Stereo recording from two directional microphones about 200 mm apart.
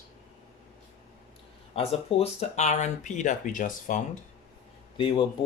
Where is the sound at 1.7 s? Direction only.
30° left (ahead or behind).